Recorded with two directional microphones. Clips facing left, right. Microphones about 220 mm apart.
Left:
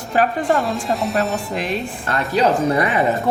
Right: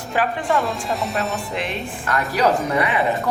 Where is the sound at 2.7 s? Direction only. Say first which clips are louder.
Left 2 dB; 45° left (ahead or behind).